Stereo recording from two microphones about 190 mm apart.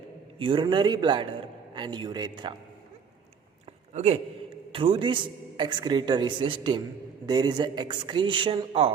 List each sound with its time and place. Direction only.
0.3 s a man's voice: 25° right (ahead or behind)
3.9 s a man's voice: 35° right (ahead or behind)